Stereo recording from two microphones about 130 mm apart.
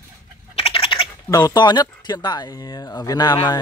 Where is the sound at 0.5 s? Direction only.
45° left (ahead or behind).